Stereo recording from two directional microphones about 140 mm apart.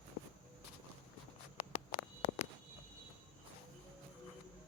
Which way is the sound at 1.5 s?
45° left (ahead or behind).